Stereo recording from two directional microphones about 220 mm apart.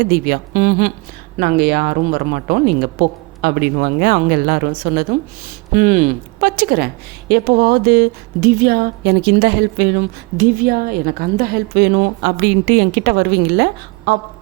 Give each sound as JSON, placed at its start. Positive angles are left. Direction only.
{"t": 0.0, "sound": "a woman's voice", "side_deg": -45}